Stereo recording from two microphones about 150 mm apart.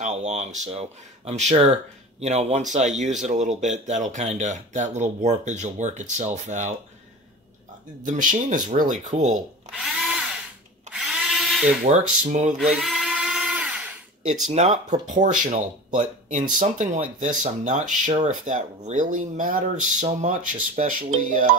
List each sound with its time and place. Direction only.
0.0 s speech: 50° right (ahead or behind)
8.0 s speech: 60° right (ahead or behind)
9.7 s drill: centre (ahead or behind)
11.8 s speech: 55° right (ahead or behind)
12.5 s sheep: centre (ahead or behind)
14.5 s speech: 50° right (ahead or behind)